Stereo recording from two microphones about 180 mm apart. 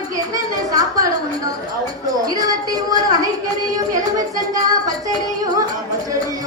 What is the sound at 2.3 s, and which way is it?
Speech, 20° right (ahead or behind).